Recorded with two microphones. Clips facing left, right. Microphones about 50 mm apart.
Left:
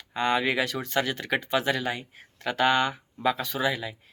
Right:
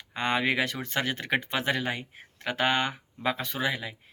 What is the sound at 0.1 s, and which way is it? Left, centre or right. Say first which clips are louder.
Speech: left 2 dB; right.